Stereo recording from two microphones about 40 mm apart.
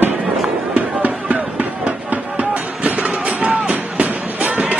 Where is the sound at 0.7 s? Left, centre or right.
Right.